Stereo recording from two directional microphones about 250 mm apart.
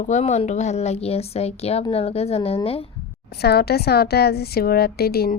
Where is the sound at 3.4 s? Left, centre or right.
Left.